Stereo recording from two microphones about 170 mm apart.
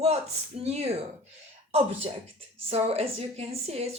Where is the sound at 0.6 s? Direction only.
40° right (ahead or behind).